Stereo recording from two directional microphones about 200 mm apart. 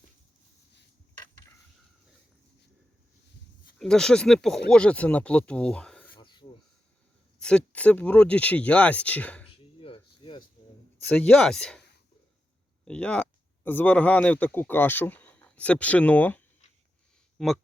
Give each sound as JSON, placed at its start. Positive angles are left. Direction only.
{"t": 3.8, "sound": "speech", "side_deg": 5}
{"t": 6.1, "sound": "snake", "side_deg": 25}
{"t": 7.3, "sound": "speech", "side_deg": 5}
{"t": 9.6, "sound": "a sound", "side_deg": 25}
{"t": 11.1, "sound": "speech", "side_deg": 5}
{"t": 12.8, "sound": "speech", "side_deg": 5}